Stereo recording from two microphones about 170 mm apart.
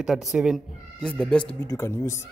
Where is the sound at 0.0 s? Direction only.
Centre (ahead or behind).